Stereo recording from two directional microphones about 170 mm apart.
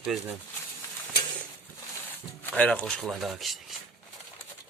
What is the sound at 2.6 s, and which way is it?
Speech, 10° left (ahead or behind).